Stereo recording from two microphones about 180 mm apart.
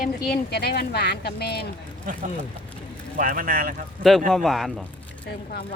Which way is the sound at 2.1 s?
45° right (ahead or behind).